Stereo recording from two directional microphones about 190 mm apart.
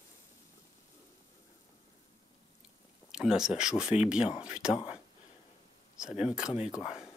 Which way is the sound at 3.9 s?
35° left (ahead or behind).